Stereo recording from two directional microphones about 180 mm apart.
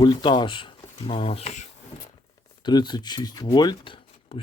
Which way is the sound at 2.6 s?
25° left (ahead or behind).